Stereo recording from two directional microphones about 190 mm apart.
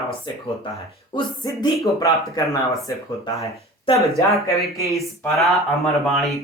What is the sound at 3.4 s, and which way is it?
Speech, 30° left (ahead or behind).